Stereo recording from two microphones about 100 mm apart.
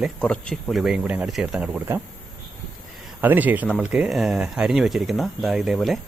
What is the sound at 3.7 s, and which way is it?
A man's voice, 5° right (ahead or behind).